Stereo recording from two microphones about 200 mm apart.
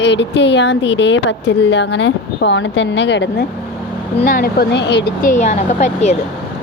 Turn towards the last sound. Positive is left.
turn(degrees=35)  # may be behind; listen again after turning